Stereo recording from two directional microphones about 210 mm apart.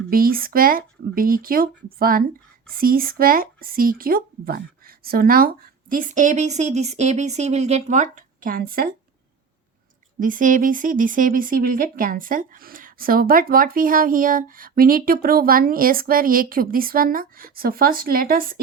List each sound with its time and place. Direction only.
0.1 s speech: 45° right (ahead or behind)
10.2 s speech: 40° right (ahead or behind)